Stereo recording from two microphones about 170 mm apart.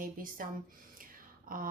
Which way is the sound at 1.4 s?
55° right (ahead or behind).